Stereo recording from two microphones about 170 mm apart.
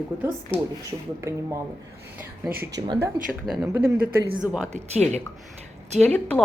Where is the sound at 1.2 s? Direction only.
15° right (ahead or behind).